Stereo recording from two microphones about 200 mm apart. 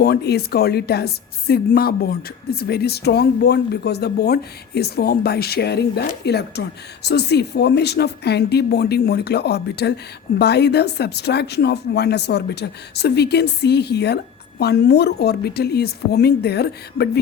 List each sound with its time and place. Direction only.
0.0 s a woman's voice: 55° left (ahead or behind)